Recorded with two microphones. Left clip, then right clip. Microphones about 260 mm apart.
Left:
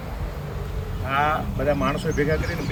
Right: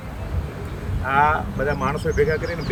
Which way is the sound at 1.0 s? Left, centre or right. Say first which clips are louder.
Right 4 dB; centre.